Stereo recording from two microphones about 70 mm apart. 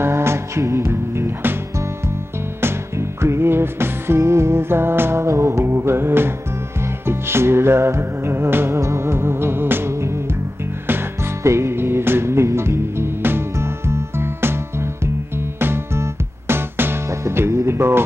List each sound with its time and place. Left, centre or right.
0.0 s music: right
11.4 s music: right